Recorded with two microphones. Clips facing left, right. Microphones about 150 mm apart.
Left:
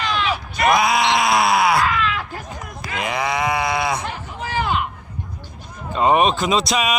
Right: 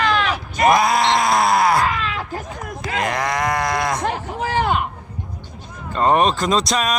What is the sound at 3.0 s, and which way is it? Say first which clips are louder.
Speech: even; 5° left (ahead or behind).